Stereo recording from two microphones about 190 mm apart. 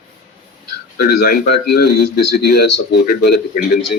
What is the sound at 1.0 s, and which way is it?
Speech, 60° left (ahead or behind).